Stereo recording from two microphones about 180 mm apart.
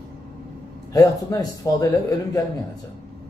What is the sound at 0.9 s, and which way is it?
Speech, 20° left (ahead or behind).